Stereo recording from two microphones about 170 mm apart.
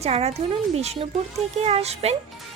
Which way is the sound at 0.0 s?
40° right (ahead or behind).